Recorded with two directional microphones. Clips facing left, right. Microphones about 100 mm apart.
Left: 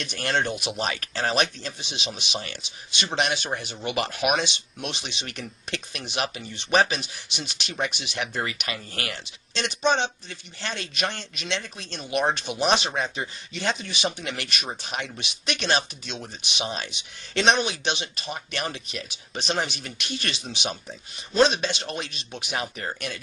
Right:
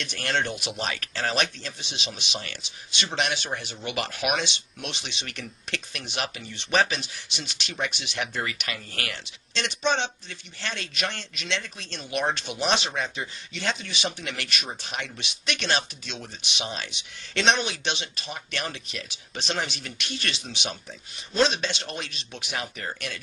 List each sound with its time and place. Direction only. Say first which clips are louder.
0.0 s speech: left 2 dB; 20° left (ahead or behind)